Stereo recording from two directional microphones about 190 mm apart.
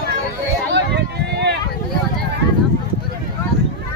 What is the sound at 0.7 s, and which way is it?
Run, 65° right (ahead or behind).